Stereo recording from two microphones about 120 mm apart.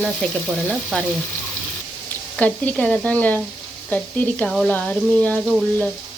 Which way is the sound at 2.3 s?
10° left (ahead or behind).